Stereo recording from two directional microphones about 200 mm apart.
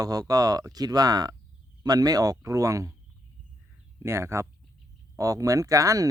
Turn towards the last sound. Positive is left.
turn(degrees=-15)  # may be behind; listen again after turning